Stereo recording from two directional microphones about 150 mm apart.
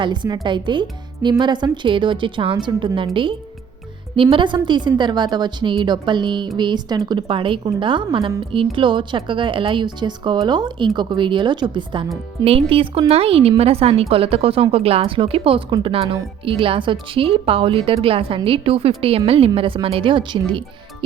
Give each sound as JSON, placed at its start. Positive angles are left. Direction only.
{"t": 0.0, "sound": "a woman's voice", "side_deg": -30}